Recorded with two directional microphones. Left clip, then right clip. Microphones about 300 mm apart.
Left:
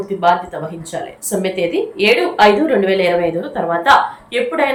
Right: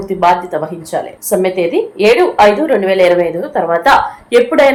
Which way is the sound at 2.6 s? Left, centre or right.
Centre.